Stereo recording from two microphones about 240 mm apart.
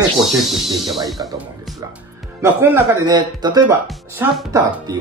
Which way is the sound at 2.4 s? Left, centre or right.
Centre.